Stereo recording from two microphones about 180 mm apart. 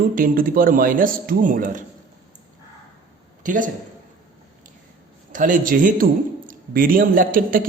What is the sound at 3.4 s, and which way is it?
Speech, 45° right (ahead or behind).